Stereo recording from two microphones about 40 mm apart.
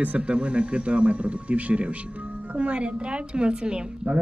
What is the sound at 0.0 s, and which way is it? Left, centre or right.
A woman's voice, right.